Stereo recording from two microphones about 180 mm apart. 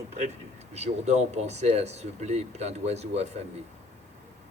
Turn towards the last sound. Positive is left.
turn(degrees=-35)  # may be behind; listen again after turning